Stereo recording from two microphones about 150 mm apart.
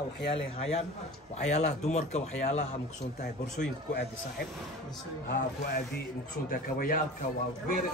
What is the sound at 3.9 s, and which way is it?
Speech, 90° left.